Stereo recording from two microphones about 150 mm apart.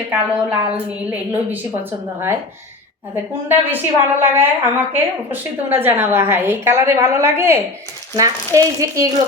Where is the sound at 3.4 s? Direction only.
15° right (ahead or behind).